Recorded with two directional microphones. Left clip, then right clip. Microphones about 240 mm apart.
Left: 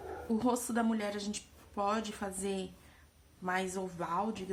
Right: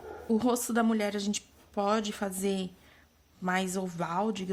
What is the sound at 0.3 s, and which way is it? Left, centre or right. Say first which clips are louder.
Speech: right 5 dB; right.